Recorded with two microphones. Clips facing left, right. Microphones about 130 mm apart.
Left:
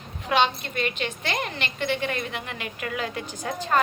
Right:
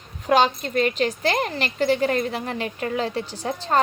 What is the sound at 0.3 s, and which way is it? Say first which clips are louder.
A woman's voice: right 4 dB; 40° right (ahead or behind).